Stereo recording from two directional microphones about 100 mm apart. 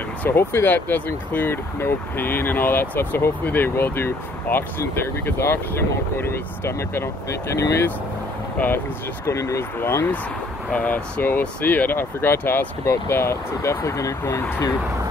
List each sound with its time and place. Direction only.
0.2 s speech: 25° left (ahead or behind)